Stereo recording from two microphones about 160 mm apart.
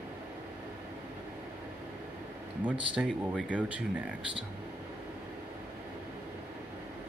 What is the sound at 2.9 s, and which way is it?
Speech, 5° right (ahead or behind).